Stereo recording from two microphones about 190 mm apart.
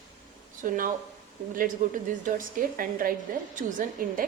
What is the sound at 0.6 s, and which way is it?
Speech, 45° right (ahead or behind).